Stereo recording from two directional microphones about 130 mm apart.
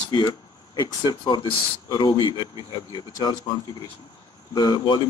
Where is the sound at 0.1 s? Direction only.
35° left (ahead or behind).